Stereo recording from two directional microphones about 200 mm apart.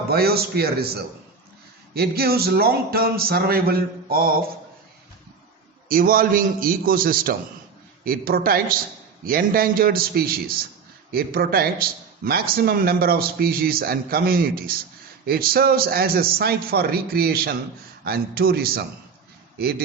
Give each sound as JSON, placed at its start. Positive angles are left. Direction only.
{"t": 0.1, "sound": "speech", "side_deg": -50}
{"t": 5.9, "sound": "speech", "side_deg": -45}